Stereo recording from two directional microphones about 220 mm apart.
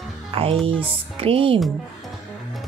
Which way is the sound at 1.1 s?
25° right (ahead or behind).